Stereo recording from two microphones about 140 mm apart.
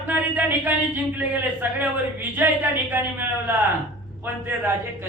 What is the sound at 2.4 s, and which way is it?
Speech, 15° right (ahead or behind).